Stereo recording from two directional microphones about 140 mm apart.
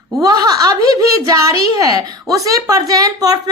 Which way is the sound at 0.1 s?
25° right (ahead or behind).